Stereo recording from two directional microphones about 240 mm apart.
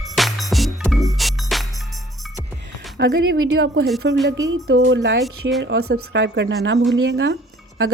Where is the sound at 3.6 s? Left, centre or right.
Right.